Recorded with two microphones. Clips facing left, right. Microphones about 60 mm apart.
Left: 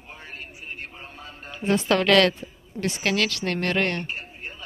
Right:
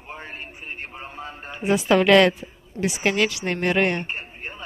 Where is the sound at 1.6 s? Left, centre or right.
Centre.